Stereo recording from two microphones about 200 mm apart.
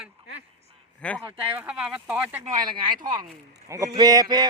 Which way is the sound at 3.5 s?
15° right (ahead or behind).